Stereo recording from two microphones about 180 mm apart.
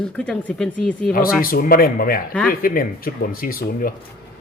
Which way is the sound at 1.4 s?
55° left (ahead or behind).